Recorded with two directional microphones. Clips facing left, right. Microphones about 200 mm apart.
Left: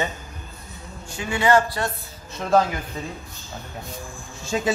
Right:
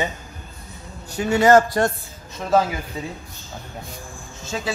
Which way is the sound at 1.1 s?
40° right (ahead or behind).